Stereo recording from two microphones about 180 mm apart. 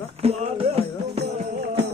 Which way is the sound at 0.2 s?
35° right (ahead or behind).